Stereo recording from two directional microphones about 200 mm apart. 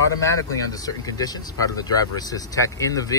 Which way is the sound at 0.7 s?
15° left (ahead or behind).